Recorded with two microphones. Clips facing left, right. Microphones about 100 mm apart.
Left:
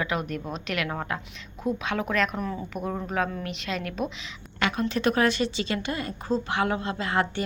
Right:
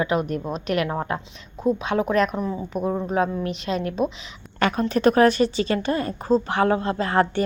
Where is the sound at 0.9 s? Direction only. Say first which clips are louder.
Right 5 dB; 25° right (ahead or behind).